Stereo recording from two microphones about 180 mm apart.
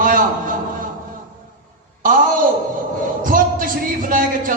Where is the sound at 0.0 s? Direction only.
50° right (ahead or behind).